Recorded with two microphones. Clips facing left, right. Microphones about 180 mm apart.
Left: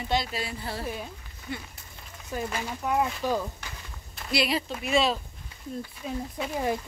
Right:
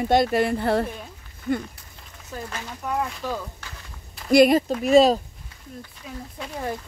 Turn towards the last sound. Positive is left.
turn(degrees=10)  # may be behind; listen again after turning